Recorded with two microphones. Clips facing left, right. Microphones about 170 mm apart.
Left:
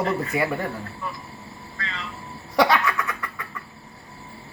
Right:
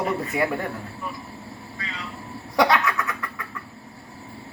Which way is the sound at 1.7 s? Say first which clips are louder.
Left 2 dB; 10° right (ahead or behind).